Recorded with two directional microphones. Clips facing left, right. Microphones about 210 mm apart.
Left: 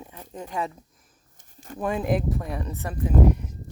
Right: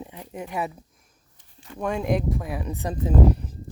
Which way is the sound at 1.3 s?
45° left (ahead or behind).